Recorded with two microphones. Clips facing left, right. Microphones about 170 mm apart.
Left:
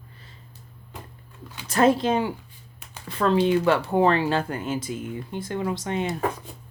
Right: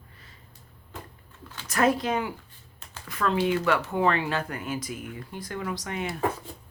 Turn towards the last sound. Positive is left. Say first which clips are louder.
# left 5 dB
turn(degrees=25)  # may be behind; listen again after turning